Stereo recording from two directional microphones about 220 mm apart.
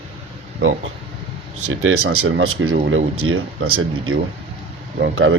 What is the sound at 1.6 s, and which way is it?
Speech, 65° right (ahead or behind).